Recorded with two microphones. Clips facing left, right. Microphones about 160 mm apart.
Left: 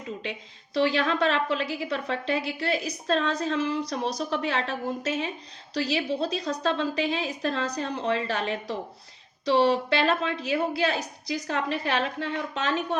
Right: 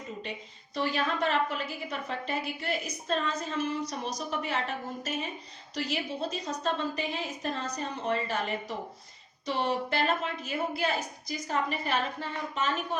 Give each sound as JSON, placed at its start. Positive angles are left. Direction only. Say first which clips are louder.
{"t": 0.2, "sound": "a woman's voice", "louder": "left 3 dB", "side_deg": 75}